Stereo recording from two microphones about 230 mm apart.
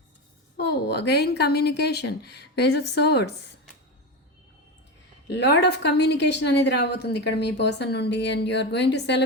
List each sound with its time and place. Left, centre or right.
0.5 s a woman's voice: left
5.3 s a woman's voice: left